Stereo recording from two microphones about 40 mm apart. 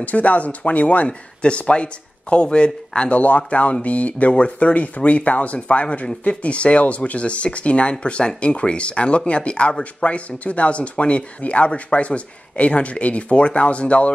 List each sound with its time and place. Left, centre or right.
0.0 s speech: left
3.2 s speech: left